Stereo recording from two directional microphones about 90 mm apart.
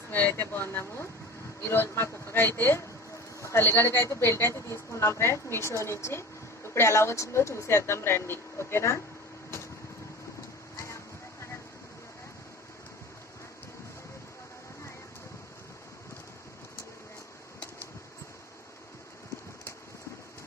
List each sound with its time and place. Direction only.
0.1 s a woman's voice: 20° left (ahead or behind)